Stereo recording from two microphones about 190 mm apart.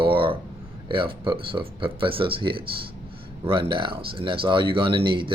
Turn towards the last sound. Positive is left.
turn(degrees=-25)  # may be behind; listen again after turning